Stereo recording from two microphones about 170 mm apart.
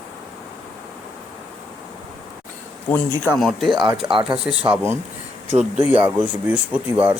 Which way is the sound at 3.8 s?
30° right (ahead or behind).